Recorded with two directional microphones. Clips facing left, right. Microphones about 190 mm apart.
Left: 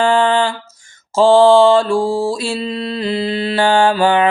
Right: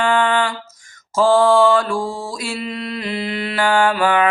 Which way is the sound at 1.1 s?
25° left (ahead or behind).